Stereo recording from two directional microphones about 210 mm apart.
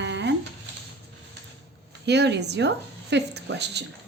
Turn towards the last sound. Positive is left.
turn(degrees=-55)  # may be behind; listen again after turning